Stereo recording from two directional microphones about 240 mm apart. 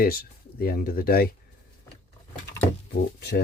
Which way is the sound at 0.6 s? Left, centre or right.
Left.